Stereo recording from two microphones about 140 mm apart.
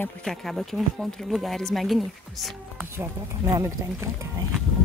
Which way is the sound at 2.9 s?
20° right (ahead or behind).